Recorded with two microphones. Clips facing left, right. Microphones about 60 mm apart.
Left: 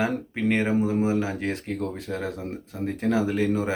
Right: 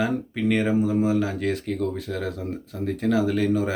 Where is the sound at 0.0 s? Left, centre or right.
Left.